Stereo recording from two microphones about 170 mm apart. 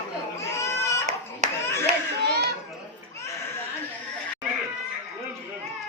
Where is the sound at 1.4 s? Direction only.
45° right (ahead or behind).